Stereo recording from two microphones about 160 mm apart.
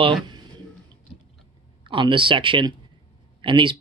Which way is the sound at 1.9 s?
30° right (ahead or behind).